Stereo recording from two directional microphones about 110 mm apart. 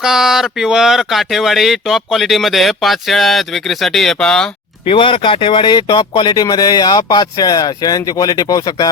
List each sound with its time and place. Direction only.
0.0 s speech: 5° right (ahead or behind)
4.9 s speech: 50° left (ahead or behind)